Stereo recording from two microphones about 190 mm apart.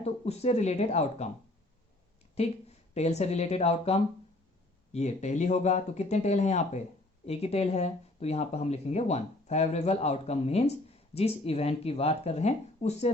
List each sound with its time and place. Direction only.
0.0 s speech: 35° left (ahead or behind)
2.3 s a woman's voice: 35° left (ahead or behind)